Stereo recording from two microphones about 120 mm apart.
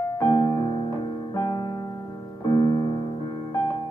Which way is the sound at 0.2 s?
35° left (ahead or behind).